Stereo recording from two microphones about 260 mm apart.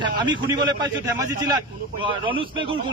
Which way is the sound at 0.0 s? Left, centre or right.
Centre.